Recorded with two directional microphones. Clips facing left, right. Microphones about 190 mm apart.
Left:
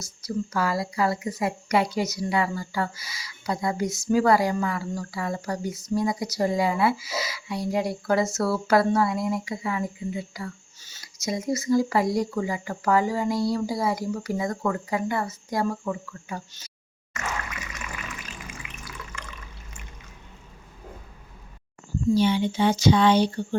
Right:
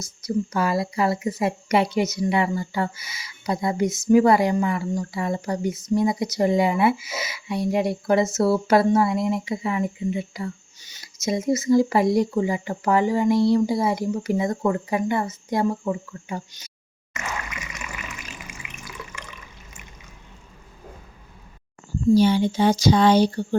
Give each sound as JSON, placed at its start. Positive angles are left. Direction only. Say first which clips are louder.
{"t": 0.2, "sound": "a woman's voice", "louder": "right 3 dB", "side_deg": -20}
{"t": 17.2, "sound": "water", "louder": "even", "side_deg": -10}
{"t": 22.1, "sound": "speech", "louder": "right 4 dB", "side_deg": -40}